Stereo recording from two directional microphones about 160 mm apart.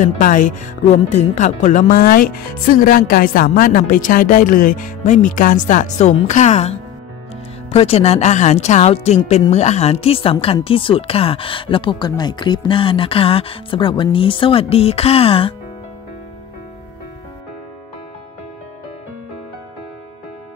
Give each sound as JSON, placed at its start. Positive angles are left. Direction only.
{"t": 0.0, "sound": "speech", "side_deg": 55}